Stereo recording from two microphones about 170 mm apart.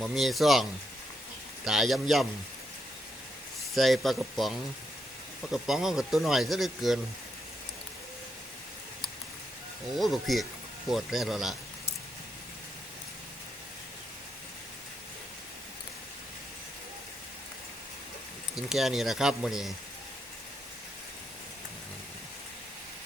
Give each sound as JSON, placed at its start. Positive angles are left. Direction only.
{"t": 0.0, "sound": "speech", "side_deg": 0}
{"t": 3.8, "sound": "speech", "side_deg": 0}
{"t": 10.0, "sound": "speech", "side_deg": 0}
{"t": 18.5, "sound": "speech", "side_deg": 0}